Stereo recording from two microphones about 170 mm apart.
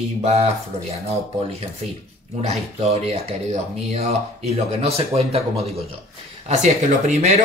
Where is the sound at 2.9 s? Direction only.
35° right (ahead or behind).